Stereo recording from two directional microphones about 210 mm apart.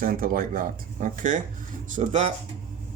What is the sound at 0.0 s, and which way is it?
Speech, 40° right (ahead or behind).